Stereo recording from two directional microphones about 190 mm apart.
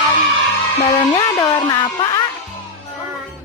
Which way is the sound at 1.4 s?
25° left (ahead or behind).